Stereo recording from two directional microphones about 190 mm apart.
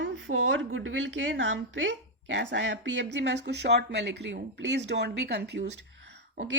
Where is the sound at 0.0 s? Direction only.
90° right; by 5.6 s 60° right (ahead or behind).